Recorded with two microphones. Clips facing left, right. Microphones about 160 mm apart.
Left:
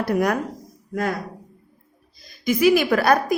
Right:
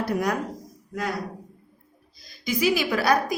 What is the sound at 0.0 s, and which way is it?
Speech, 60° left (ahead or behind).